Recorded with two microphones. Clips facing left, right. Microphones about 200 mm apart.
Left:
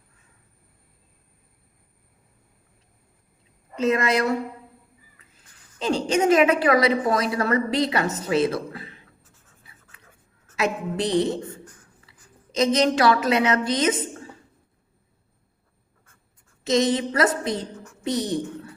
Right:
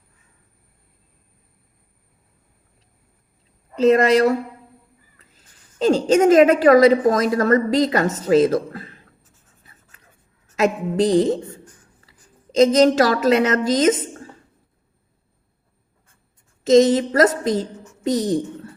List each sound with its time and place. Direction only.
3.8 s a woman's voice: 35° right (ahead or behind)
5.8 s a woman's voice: 40° right (ahead or behind)
10.5 s a woman's voice: 45° right (ahead or behind)
16.7 s a woman's voice: 45° right (ahead or behind)